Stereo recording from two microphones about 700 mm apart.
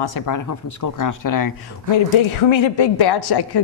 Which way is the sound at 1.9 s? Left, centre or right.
Left.